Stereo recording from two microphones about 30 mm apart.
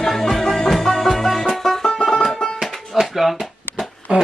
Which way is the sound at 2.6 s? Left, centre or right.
Centre.